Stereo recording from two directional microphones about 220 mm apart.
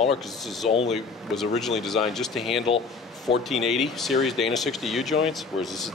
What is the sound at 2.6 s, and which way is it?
Speech, 25° left (ahead or behind).